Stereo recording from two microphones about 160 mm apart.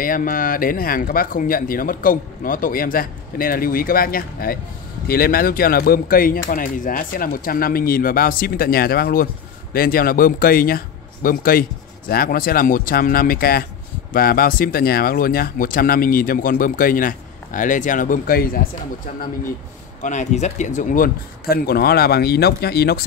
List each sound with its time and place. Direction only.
0.0 s speech: 60° left (ahead or behind)
20.0 s speech: 50° left (ahead or behind); by 23.0 s 80° left